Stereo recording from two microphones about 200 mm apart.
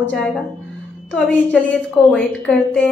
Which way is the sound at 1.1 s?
5° left (ahead or behind).